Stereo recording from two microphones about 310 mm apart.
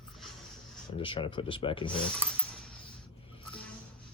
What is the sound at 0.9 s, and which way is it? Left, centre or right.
Speech, centre.